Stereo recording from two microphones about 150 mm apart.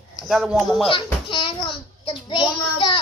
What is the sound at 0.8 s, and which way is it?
Child singing, 35° left (ahead or behind).